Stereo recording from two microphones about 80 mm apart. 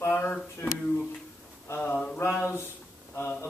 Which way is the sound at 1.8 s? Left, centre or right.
Centre.